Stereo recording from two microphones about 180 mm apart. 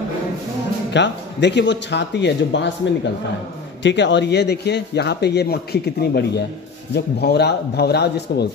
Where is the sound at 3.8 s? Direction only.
80° left; by 8.5 s 65° left (ahead or behind).